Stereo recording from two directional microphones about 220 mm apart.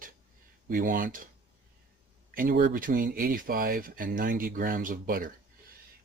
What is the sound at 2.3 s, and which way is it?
Speech, 40° right (ahead or behind).